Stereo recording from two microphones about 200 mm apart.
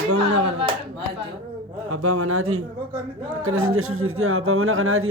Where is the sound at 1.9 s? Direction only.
90° right.